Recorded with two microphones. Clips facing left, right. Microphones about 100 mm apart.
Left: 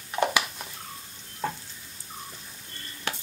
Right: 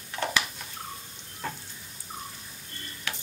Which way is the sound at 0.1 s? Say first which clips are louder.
Left 4 dB; 15° left (ahead or behind).